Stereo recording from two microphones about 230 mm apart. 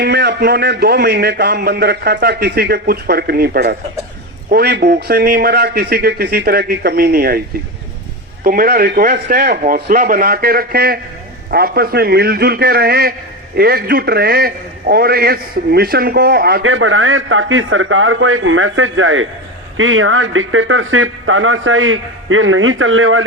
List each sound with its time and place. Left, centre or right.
0.0 s a man's voice: right
8.4 s a man's voice: right
16.6 s a man's voice: right